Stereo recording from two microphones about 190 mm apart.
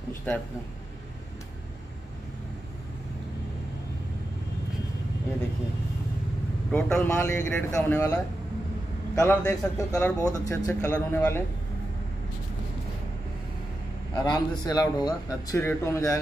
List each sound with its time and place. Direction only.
0.3 s a man's voice: 5° left (ahead or behind)
6.7 s a man's voice: 10° left (ahead or behind)
10.2 s a man's voice: 20° left (ahead or behind)
14.2 s a man's voice: 20° left (ahead or behind)